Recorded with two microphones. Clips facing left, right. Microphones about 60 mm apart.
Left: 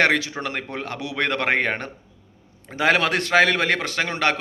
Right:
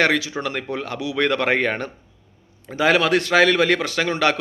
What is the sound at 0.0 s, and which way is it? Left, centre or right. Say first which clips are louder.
Speech: even; left.